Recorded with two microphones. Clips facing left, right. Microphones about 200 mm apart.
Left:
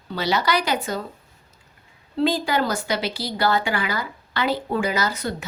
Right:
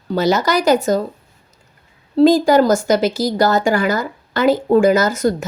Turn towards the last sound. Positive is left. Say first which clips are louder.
# right 9 dB
turn(degrees=-45)  # may be behind; listen again after turning